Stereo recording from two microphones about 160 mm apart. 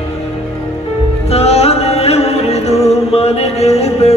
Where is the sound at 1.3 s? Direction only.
40° left (ahead or behind).